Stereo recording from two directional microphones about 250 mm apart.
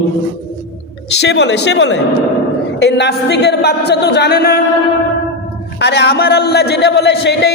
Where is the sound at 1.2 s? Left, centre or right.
Left.